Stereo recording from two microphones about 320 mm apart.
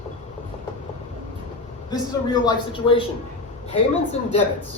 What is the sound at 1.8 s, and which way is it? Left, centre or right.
A man's voice, centre.